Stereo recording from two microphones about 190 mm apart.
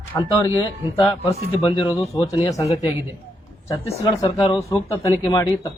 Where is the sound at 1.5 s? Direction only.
30° left (ahead or behind).